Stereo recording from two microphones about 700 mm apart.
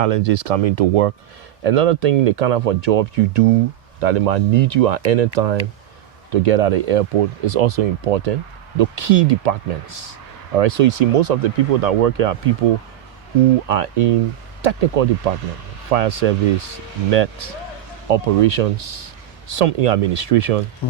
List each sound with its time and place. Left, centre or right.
0.0 s speech: right
13.7 s speech: right